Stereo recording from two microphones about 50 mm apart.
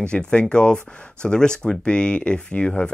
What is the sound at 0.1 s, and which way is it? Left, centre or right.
Speech, centre.